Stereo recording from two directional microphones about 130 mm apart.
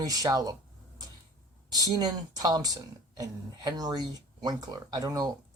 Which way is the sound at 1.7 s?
30° right (ahead or behind).